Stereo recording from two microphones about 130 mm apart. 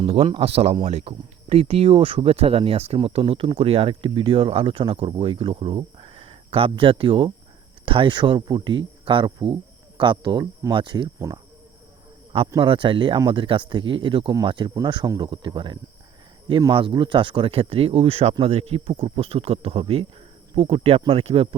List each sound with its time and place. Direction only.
0.0 s speech: 45° right (ahead or behind)
12.5 s speech: 40° right (ahead or behind)